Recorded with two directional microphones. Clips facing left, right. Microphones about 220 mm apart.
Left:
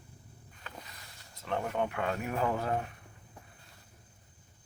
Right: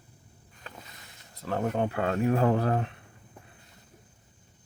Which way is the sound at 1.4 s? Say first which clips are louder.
Right 4 dB; 35° right (ahead or behind).